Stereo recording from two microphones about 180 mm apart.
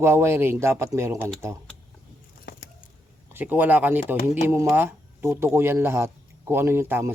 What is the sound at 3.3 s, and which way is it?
Speech, 10° right (ahead or behind).